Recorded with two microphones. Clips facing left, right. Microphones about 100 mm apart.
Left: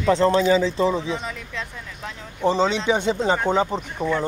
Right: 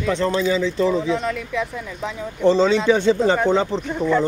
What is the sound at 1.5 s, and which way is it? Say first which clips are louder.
Speech: right 8 dB; 15° right (ahead or behind).